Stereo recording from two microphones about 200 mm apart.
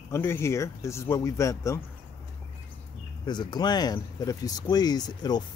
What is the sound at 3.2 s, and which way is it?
Speech, 20° left (ahead or behind).